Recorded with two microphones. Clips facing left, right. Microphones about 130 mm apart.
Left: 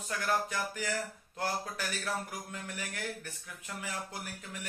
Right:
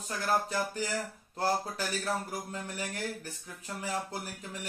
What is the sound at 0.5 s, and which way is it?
Speech, 35° right (ahead or behind).